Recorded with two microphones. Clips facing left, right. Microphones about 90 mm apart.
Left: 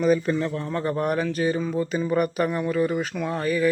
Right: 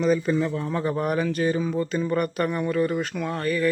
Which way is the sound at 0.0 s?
Centre (ahead or behind).